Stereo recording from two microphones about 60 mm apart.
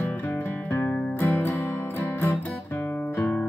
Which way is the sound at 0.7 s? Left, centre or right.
Left.